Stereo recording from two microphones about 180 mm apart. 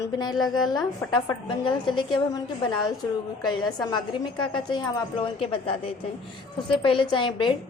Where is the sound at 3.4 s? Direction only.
20° left (ahead or behind).